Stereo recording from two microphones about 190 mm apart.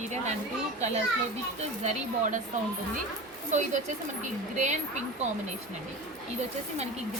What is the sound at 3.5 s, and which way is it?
Speech, 40° right (ahead or behind).